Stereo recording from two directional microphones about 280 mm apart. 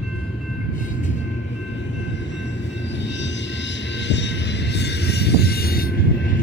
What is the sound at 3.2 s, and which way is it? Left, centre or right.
Vehicle, left.